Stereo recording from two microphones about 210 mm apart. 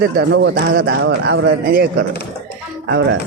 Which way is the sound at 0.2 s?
55° right (ahead or behind).